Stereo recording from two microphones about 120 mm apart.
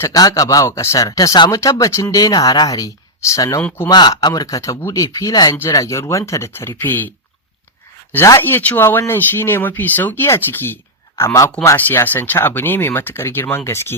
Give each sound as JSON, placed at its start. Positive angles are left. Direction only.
{"t": 0.0, "sound": "speech", "side_deg": 30}
{"t": 8.1, "sound": "speech", "side_deg": 20}